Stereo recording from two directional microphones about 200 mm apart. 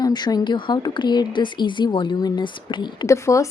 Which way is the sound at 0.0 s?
20° left (ahead or behind).